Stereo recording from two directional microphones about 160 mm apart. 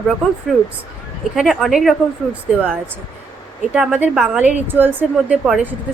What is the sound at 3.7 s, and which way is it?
A woman's voice, 10° right (ahead or behind).